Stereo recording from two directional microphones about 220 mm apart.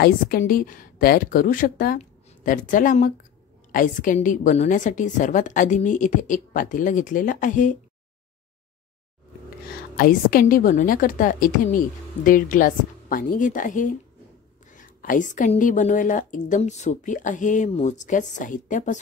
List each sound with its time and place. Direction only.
0.0 s speech: 40° left (ahead or behind)
9.9 s speech: 40° left (ahead or behind)